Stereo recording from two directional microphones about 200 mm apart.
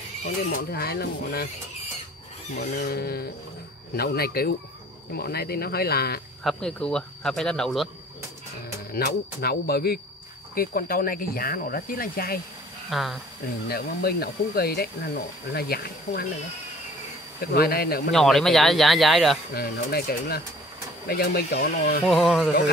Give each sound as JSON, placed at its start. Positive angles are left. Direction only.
{"t": 0.2, "sound": "speech", "side_deg": 45}
{"t": 2.5, "sound": "speech", "side_deg": 50}
{"t": 6.4, "sound": "speech", "side_deg": 5}
{"t": 8.9, "sound": "speech", "side_deg": 50}
{"t": 12.9, "sound": "speech", "side_deg": 0}
{"t": 13.7, "sound": "speech", "side_deg": 50}
{"t": 17.6, "sound": "speech", "side_deg": 50}
{"t": 18.1, "sound": "speech", "side_deg": 0}
{"t": 19.5, "sound": "speech", "side_deg": 50}
{"t": 22.0, "sound": "speech", "side_deg": 0}